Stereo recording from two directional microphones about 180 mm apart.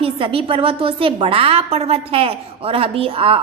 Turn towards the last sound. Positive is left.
turn(degrees=-30)  # may be behind; listen again after turning